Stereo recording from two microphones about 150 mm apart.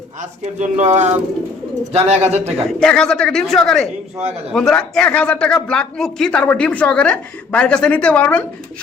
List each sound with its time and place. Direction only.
0.2 s speech: 50° right (ahead or behind)
2.6 s speech: 5° left (ahead or behind)